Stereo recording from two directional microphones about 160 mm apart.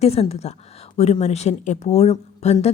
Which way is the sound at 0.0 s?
40° left (ahead or behind).